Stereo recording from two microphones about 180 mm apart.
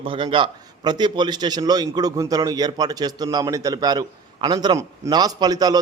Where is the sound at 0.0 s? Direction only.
30° right (ahead or behind).